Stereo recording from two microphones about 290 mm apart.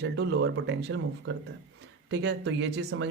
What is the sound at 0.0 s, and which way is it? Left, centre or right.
Speech, right.